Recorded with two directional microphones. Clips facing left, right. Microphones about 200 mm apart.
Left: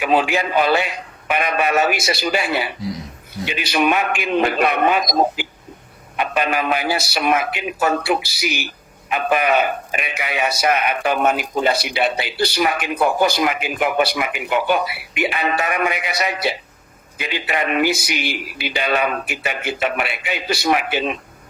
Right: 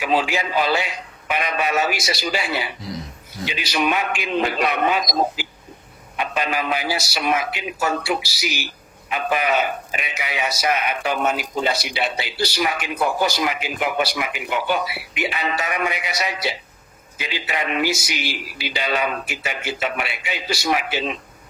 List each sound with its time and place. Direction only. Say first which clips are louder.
0.0 s speech: left 3 dB; 55° left (ahead or behind)